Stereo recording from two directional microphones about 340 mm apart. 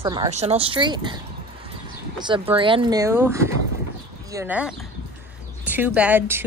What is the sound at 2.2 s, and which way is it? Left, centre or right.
Speech, centre.